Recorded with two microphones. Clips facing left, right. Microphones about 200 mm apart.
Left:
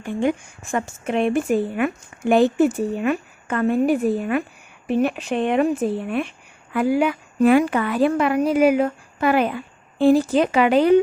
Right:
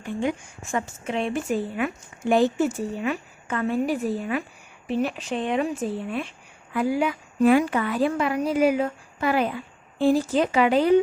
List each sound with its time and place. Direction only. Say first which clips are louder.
0.1 s speech: left 5 dB; 55° left (ahead or behind)